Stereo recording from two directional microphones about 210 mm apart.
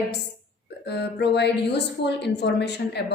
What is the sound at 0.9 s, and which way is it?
A woman's voice, 55° left (ahead or behind).